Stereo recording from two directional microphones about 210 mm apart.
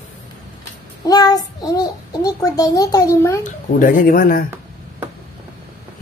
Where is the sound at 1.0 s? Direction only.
20° left (ahead or behind).